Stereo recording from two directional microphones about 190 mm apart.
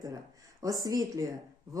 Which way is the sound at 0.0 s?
20° right (ahead or behind).